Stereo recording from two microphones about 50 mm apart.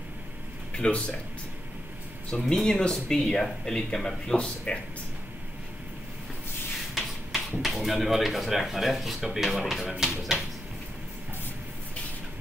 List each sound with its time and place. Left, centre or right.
0.7 s speech: centre
2.5 s speech: centre
7.0 s speech: centre